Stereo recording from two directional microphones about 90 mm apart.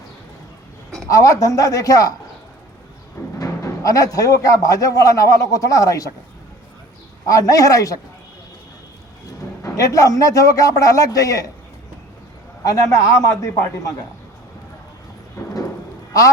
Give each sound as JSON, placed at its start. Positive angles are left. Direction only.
{"t": 1.1, "sound": "speech", "side_deg": 40}
{"t": 3.3, "sound": "speech", "side_deg": 40}
{"t": 7.3, "sound": "speech", "side_deg": 40}
{"t": 9.6, "sound": "speech", "side_deg": 35}
{"t": 12.6, "sound": "speech", "side_deg": 40}
{"t": 15.4, "sound": "a sound", "side_deg": 45}